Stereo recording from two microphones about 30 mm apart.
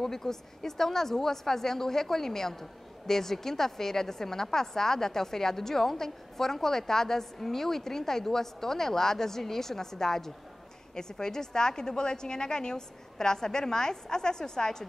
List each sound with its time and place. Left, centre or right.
0.0 s a woman's voice: centre